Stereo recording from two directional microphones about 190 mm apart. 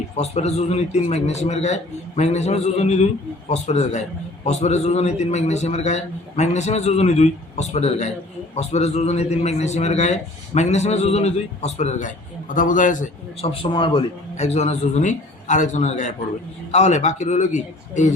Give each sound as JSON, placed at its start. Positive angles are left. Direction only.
{"t": 0.2, "sound": "a man's voice", "side_deg": 35}